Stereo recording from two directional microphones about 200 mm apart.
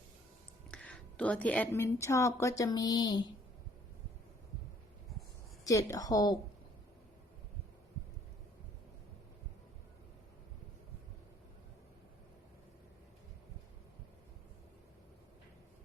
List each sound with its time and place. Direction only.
0.7 s a woman's voice: 5° left (ahead or behind)
5.6 s a woman's voice: 15° left (ahead or behind)